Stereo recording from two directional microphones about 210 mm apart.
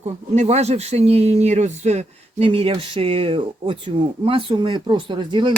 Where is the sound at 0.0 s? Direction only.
30° right (ahead or behind).